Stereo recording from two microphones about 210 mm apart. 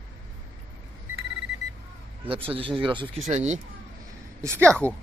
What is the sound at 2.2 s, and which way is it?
Speech, 25° right (ahead or behind).